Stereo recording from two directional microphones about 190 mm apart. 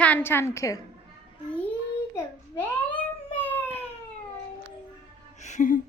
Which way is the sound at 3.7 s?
30° left (ahead or behind).